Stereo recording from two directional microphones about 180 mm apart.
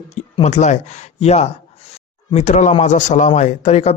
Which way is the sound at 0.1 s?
40° left (ahead or behind).